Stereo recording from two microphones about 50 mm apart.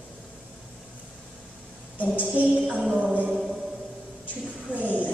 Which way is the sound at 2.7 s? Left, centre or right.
Right.